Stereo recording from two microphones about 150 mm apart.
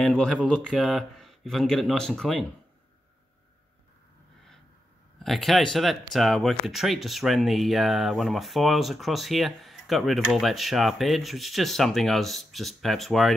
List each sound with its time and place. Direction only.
0.0 s speech: centre (ahead or behind)
5.2 s speech: centre (ahead or behind)